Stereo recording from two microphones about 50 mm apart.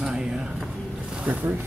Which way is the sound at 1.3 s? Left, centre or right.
Right.